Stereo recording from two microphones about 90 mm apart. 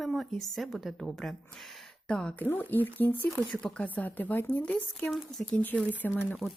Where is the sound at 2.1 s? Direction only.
10° left (ahead or behind).